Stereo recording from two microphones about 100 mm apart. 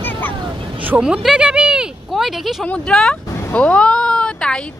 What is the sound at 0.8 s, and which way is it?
Speech, 15° right (ahead or behind).